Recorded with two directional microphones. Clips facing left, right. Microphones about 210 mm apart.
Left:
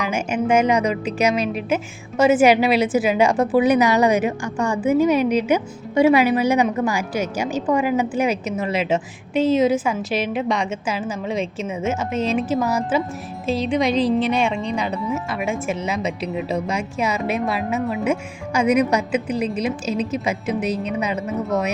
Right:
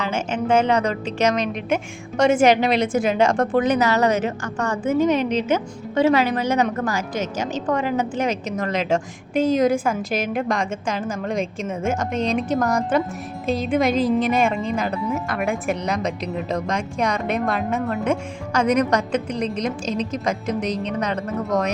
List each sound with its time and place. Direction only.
0.0 s a woman's voice: 10° left (ahead or behind)
9.4 s a woman's voice: 45° right (ahead or behind)
9.7 s speech: centre (ahead or behind)